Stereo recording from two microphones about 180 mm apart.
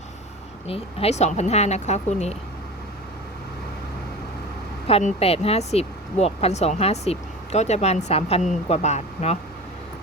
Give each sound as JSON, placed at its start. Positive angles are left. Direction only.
{"t": 0.7, "sound": "speech", "side_deg": 35}
{"t": 4.9, "sound": "speech", "side_deg": 35}